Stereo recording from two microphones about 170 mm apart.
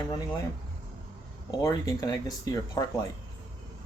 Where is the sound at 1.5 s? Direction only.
20° left (ahead or behind).